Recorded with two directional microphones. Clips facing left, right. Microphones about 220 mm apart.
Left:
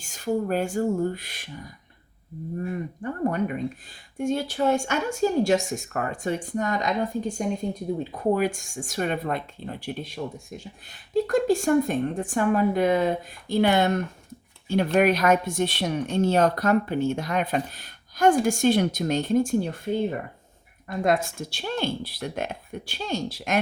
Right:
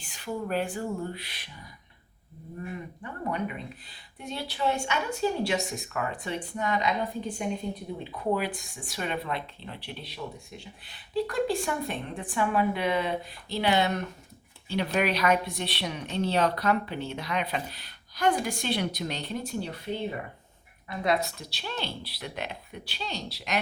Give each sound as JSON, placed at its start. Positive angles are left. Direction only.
{"t": 0.0, "sound": "speech", "side_deg": 45}
{"t": 2.6, "sound": "speech", "side_deg": 45}